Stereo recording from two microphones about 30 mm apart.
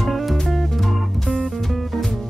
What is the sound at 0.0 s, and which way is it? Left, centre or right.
Music, centre.